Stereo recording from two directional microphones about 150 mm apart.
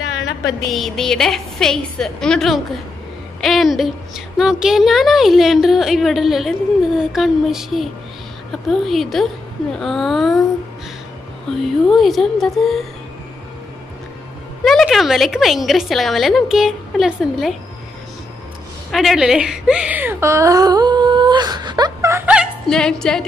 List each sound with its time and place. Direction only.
0.7 s a woman's voice: centre (ahead or behind)
11.9 s a woman's voice: centre (ahead or behind)
14.6 s a woman's voice: centre (ahead or behind)
18.9 s a woman's voice: centre (ahead or behind); by 22.3 s 20° right (ahead or behind)
22.3 s music: centre (ahead or behind)